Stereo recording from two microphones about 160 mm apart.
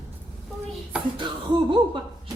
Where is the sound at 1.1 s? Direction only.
30° right (ahead or behind).